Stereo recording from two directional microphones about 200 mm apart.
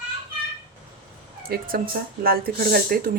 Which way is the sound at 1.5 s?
45° right (ahead or behind).